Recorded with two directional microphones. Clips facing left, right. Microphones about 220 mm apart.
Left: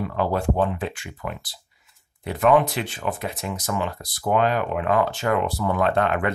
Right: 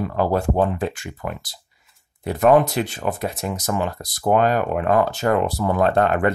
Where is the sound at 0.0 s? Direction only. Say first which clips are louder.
Right 3 dB; 40° right (ahead or behind).